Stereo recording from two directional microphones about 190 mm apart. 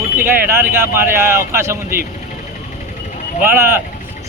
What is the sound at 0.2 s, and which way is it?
Speech, 10° right (ahead or behind).